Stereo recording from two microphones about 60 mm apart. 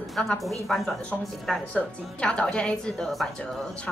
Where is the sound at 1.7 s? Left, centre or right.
Centre.